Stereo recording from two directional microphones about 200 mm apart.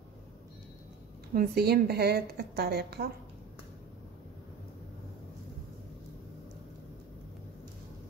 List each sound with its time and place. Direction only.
1.3 s a woman's voice: 50° right (ahead or behind)